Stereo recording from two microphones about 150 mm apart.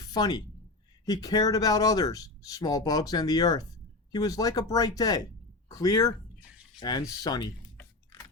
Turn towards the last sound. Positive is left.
turn(degrees=25)  # may be behind; listen again after turning